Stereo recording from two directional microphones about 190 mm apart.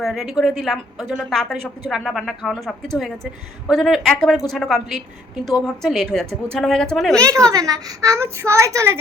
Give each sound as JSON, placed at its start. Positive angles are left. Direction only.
{"t": 0.0, "sound": "a woman's voice", "side_deg": 0}
{"t": 7.2, "sound": "a woman's voice", "side_deg": -15}